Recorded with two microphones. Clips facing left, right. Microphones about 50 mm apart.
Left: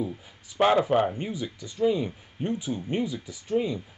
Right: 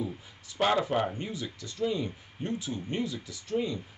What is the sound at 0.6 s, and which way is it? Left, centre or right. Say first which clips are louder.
Speech: left 5 dB; centre.